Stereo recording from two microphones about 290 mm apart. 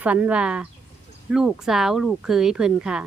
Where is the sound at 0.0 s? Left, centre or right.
Centre.